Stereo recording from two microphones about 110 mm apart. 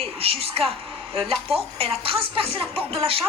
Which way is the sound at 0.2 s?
60° right (ahead or behind).